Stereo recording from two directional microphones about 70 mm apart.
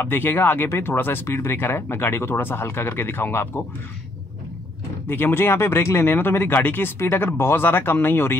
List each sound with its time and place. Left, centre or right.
0.0 s speech: left
5.0 s speech: left
5.8 s speech: left
6.0 s speech: left